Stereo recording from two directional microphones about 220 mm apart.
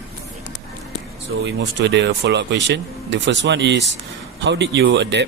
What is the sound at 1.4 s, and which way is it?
Speech, 50° right (ahead or behind).